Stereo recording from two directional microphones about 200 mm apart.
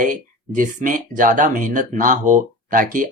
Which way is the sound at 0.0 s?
40° right (ahead or behind).